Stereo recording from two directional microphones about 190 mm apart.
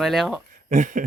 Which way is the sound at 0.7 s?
40° right (ahead or behind).